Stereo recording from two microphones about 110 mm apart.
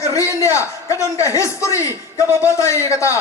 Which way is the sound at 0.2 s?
25° left (ahead or behind).